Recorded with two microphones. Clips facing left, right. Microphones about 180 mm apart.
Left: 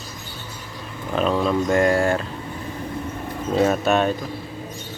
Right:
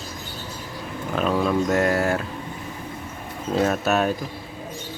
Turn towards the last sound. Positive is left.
turn(degrees=-5)  # may be behind; listen again after turning